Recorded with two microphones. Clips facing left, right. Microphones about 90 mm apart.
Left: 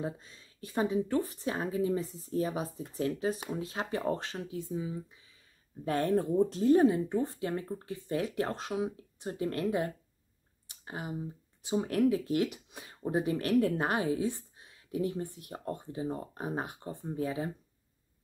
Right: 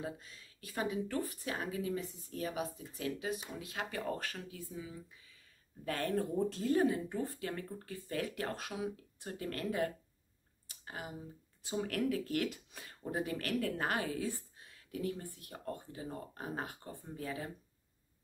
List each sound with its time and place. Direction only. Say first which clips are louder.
0.0 s speech: left 5 dB; 30° left (ahead or behind)
10.7 s a sound: left 6 dB; 25° left (ahead or behind)
11.6 s speech: left 7 dB; 25° left (ahead or behind)